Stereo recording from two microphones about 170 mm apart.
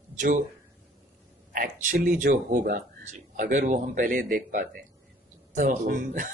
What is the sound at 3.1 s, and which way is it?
Speech, 45° right (ahead or behind).